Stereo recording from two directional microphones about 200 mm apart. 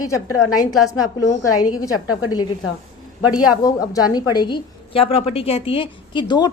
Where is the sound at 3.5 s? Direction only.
15° left (ahead or behind).